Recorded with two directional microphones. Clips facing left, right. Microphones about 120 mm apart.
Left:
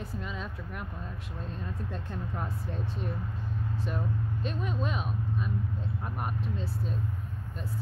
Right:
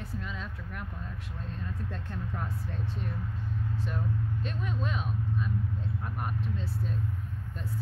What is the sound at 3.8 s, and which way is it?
Speech, 15° left (ahead or behind).